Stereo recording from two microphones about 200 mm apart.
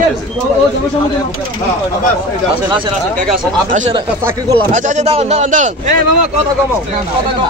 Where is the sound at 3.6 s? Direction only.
40° right (ahead or behind).